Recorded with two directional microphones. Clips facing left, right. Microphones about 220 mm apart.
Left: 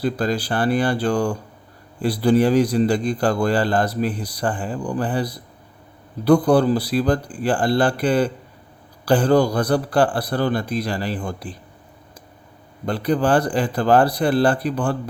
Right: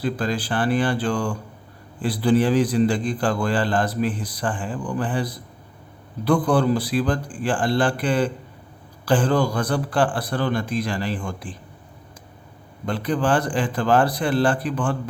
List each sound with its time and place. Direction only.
0.0 s a man's voice: 40° left (ahead or behind)
12.8 s a man's voice: 35° left (ahead or behind)